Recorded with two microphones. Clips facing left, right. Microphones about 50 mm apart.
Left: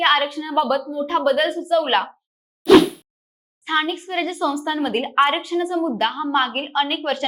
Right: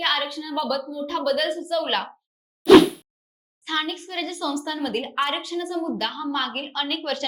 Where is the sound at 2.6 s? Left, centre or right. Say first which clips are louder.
Even; centre.